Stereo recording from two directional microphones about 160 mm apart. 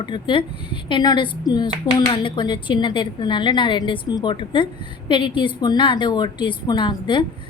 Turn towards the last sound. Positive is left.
turn(degrees=30)  # may be behind; listen again after turning